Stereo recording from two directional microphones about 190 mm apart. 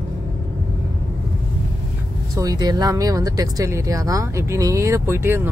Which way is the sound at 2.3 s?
20° right (ahead or behind).